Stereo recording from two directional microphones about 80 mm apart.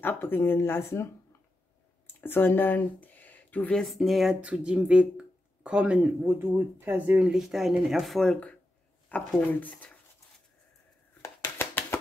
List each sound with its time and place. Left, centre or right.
0.0 s speech: left
2.2 s speech: left
3.7 s speech: centre
4.4 s speech: centre
6.2 s speech: right
7.2 s speech: centre
9.1 s speech: centre
11.2 s a sound: left